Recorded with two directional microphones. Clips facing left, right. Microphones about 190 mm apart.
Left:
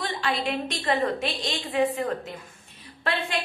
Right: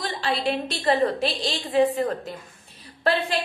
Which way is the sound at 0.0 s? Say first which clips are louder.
Right 2 dB; 30° right (ahead or behind).